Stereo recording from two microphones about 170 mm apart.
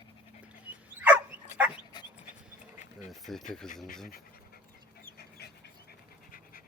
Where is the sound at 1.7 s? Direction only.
25° left (ahead or behind).